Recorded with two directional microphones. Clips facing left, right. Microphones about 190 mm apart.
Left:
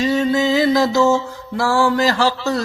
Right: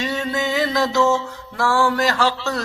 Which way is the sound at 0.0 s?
30° left (ahead or behind).